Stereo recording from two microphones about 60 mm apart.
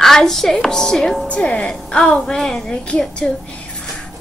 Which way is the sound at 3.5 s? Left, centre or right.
Centre.